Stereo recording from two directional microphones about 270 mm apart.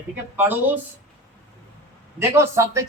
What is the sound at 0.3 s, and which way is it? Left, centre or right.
Speech, centre.